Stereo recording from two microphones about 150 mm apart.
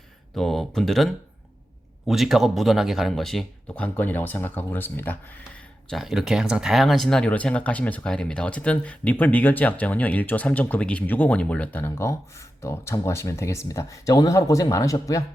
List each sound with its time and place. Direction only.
0.3 s speech: centre (ahead or behind); by 15.2 s 20° left (ahead or behind)